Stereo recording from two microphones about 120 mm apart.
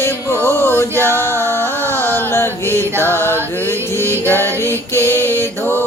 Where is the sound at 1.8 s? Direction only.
15° left (ahead or behind).